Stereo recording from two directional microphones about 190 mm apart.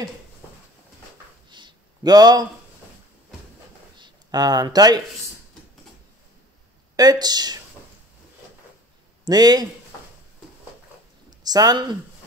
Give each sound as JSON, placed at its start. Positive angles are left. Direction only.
{"t": 1.5, "sound": "a sound", "side_deg": -20}
{"t": 4.0, "sound": "speech", "side_deg": -20}
{"t": 7.0, "sound": "speech", "side_deg": -20}
{"t": 9.2, "sound": "speech", "side_deg": -20}
{"t": 11.2, "sound": "speech", "side_deg": -20}